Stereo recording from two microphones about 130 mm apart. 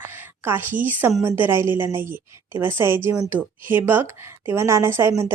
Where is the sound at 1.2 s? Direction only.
15° right (ahead or behind).